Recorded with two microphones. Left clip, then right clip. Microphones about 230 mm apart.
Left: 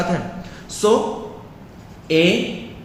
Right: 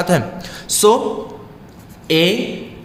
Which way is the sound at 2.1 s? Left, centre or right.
Right.